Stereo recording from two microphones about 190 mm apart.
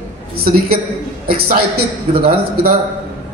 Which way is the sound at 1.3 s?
55° right (ahead or behind).